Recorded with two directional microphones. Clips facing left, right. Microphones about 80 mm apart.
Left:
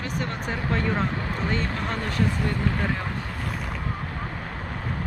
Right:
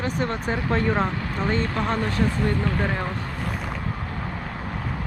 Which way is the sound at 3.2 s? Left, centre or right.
Centre.